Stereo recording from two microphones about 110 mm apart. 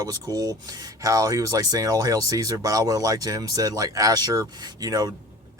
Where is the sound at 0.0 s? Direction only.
35° right (ahead or behind).